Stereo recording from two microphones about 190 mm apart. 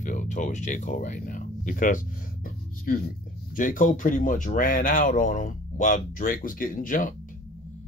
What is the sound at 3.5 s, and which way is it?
Speech, 45° left (ahead or behind).